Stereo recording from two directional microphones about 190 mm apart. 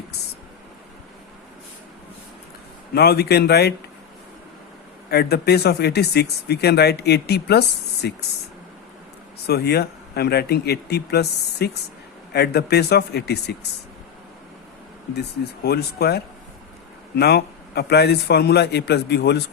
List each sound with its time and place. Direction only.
2.9 s speech: 60° left (ahead or behind)
5.1 s speech: 55° left (ahead or behind)
9.5 s speech: 55° left (ahead or behind)
15.6 s speech: 55° left (ahead or behind)